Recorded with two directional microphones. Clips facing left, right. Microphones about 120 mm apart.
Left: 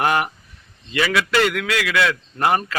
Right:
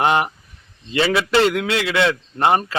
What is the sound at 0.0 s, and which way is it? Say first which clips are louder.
A man's voice: right 2 dB; 25° right (ahead or behind).